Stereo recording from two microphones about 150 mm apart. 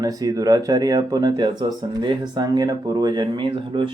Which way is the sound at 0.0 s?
25° right (ahead or behind).